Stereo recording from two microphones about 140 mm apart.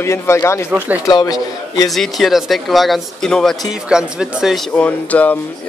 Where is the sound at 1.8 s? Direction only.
Centre (ahead or behind).